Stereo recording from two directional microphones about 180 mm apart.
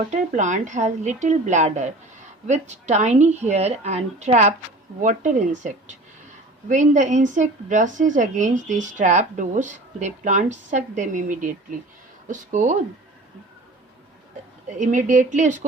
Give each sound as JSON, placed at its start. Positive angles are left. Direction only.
{"t": 0.1, "sound": "a woman's voice", "side_deg": -45}
{"t": 14.8, "sound": "a woman's voice", "side_deg": -45}